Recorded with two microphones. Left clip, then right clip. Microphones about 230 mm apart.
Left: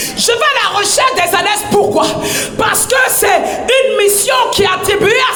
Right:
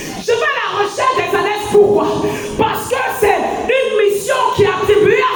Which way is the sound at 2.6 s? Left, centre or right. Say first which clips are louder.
Left 5 dB; left.